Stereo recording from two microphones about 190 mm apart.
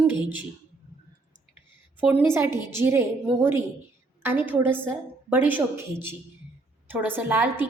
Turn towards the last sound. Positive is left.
turn(degrees=-10)  # may be behind; listen again after turning